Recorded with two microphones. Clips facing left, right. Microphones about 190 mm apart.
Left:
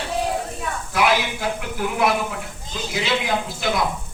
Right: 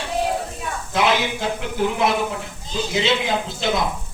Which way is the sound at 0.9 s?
25° right (ahead or behind).